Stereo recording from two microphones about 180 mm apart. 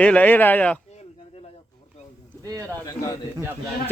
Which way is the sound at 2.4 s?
15° right (ahead or behind).